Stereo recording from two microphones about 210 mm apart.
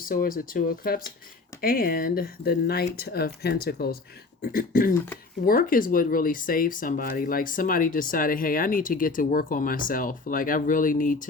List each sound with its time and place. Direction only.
0.0 s speech: 40° left (ahead or behind)